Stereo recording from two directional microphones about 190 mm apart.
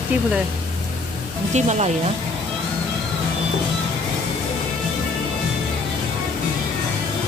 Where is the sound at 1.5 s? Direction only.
35° right (ahead or behind).